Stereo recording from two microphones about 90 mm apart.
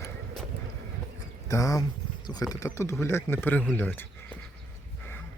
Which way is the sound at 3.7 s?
20° left (ahead or behind).